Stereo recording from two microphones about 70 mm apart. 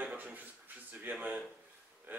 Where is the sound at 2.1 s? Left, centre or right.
Right.